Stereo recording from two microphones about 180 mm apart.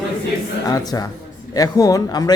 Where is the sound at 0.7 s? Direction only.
20° left (ahead or behind).